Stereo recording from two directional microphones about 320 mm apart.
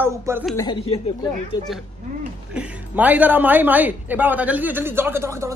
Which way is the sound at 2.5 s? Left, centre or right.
Centre.